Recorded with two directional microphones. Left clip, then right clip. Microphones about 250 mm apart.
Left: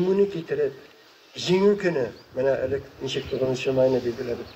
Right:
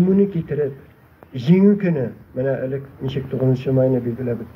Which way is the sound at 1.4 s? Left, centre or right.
Left.